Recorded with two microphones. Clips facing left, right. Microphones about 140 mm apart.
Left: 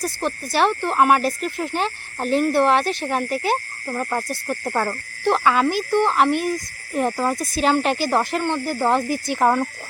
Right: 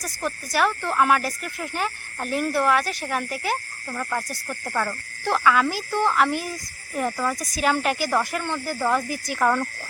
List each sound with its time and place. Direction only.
0.0 s speech: 25° left (ahead or behind)
4.7 s speech: 40° left (ahead or behind)
5.2 s speech: 25° left (ahead or behind)